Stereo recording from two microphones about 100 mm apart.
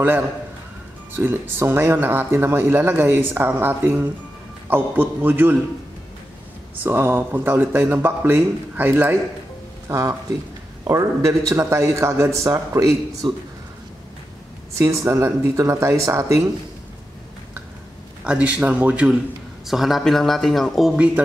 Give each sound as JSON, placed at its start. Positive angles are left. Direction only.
{"t": 1.1, "sound": "speech", "side_deg": -20}
{"t": 6.8, "sound": "a man's voice", "side_deg": -20}
{"t": 14.8, "sound": "speech", "side_deg": -30}
{"t": 18.2, "sound": "speech", "side_deg": -10}
{"t": 19.6, "sound": "a man's voice", "side_deg": 0}